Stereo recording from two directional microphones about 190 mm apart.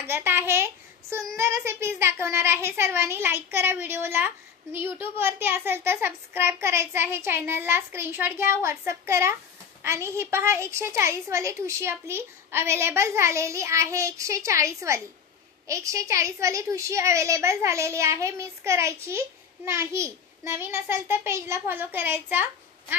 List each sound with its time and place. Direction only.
0.0 s a woman's voice: 10° right (ahead or behind)